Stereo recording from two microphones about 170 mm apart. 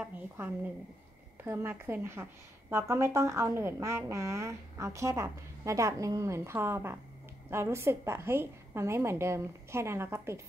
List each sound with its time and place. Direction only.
0.4 s a woman's voice: 15° right (ahead or behind)